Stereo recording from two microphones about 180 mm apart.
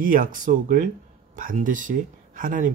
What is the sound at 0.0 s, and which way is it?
Speech, 50° right (ahead or behind).